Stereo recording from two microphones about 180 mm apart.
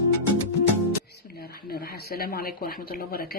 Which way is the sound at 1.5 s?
55° left (ahead or behind).